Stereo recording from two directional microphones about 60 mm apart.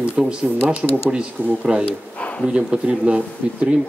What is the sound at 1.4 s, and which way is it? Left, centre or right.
Speech, left.